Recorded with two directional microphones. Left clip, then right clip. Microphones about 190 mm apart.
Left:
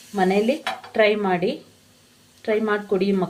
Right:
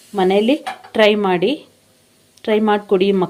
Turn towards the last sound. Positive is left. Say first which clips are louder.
# right 7 dB
turn(degrees=-50)  # may be behind; listen again after turning